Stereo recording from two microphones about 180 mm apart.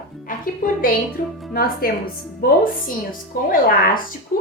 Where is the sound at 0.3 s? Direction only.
50° left (ahead or behind).